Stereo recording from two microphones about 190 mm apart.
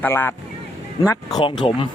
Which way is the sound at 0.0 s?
10° left (ahead or behind).